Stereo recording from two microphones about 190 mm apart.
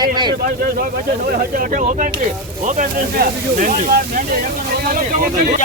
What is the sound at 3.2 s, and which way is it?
Speech, 45° right (ahead or behind).